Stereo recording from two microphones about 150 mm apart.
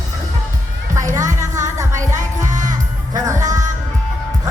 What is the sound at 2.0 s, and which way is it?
Music, 55° right (ahead or behind).